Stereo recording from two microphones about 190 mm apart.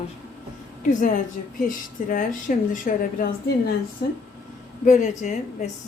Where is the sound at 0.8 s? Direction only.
45° left (ahead or behind).